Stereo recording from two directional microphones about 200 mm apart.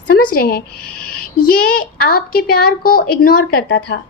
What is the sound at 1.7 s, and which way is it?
A woman's voice, 45° left (ahead or behind).